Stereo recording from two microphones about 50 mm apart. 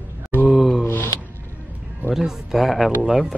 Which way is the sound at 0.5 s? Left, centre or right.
Centre.